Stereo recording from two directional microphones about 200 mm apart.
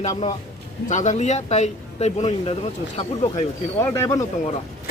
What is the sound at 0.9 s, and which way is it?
Speech, 35° left (ahead or behind).